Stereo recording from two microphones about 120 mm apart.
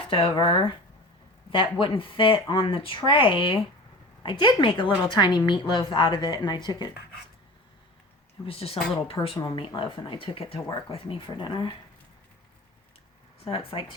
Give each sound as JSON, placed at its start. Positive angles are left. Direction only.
{"t": 0.1, "sound": "speech", "side_deg": 45}
{"t": 8.4, "sound": "speech", "side_deg": 55}
{"t": 13.4, "sound": "speech", "side_deg": 50}